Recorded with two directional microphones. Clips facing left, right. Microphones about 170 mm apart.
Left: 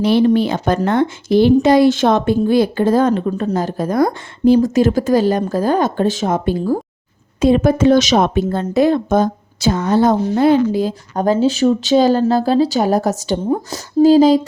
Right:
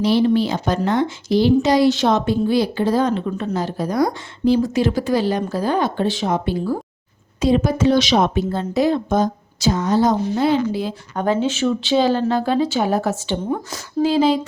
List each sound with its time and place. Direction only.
0.0 s speech: 55° left (ahead or behind); by 14.4 s 40° left (ahead or behind)